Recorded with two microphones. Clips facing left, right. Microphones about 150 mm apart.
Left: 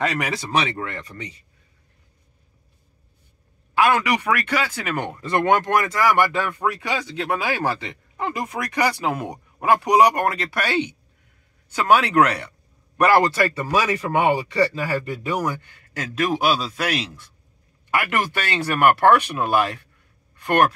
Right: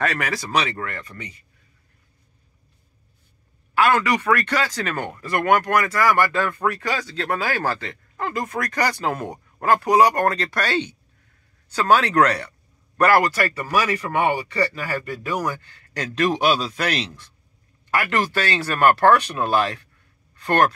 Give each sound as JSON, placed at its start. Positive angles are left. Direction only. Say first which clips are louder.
{"t": 0.0, "sound": "speech", "louder": "even", "side_deg": 20}
{"t": 3.7, "sound": "speech", "louder": "even", "side_deg": 15}